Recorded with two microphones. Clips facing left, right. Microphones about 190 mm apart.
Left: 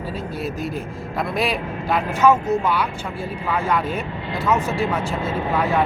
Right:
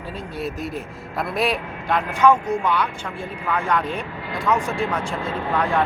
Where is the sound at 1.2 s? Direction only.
Centre (ahead or behind).